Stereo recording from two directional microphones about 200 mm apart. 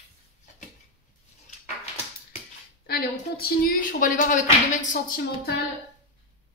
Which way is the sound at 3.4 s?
45° left (ahead or behind).